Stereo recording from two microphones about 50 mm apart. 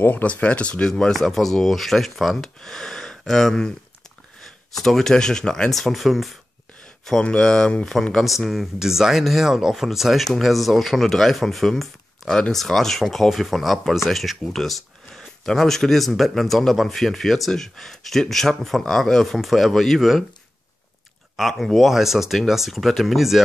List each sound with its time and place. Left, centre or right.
0.0 s speech: left; by 1.1 s centre
1.2 s speech: centre
4.7 s speech: centre
7.1 s speech: centre
8.4 s speech: centre
21.4 s speech: centre